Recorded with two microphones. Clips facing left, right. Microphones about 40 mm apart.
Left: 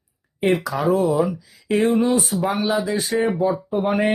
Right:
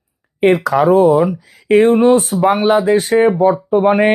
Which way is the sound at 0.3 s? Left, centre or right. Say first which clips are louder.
Right 8 dB; right.